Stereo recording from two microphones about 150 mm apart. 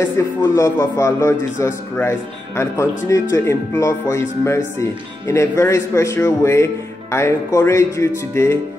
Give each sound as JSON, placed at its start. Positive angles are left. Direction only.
{"t": 0.4, "sound": "speech", "side_deg": 20}